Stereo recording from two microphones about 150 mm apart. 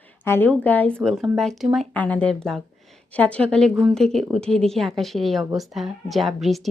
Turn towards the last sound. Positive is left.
turn(degrees=0)  # may be behind; listen again after turning